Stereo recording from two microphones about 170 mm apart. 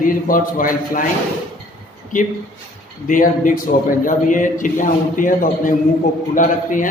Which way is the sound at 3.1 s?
50° left (ahead or behind).